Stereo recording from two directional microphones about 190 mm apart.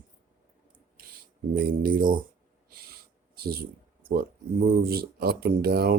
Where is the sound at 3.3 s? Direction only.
55° right (ahead or behind).